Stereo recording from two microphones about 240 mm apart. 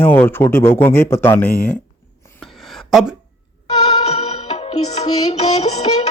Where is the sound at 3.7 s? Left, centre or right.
Left.